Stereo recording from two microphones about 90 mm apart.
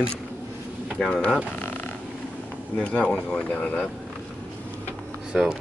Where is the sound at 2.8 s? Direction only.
15° left (ahead or behind).